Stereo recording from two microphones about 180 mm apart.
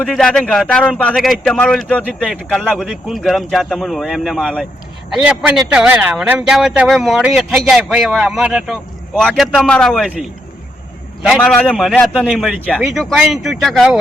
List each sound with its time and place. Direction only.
0.0 s speech: 5° left (ahead or behind)
11.3 s speech: 5° left (ahead or behind)